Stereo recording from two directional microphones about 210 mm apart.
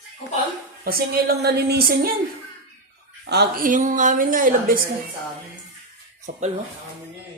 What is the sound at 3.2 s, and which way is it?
A woman's voice, 50° right (ahead or behind).